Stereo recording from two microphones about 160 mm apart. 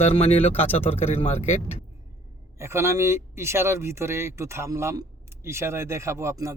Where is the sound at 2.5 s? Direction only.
15° right (ahead or behind).